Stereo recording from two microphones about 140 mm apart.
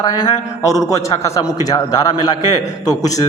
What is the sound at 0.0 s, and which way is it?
A man's voice, 25° left (ahead or behind).